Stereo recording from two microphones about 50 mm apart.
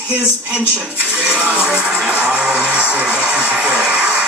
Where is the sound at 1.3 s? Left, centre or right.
Right.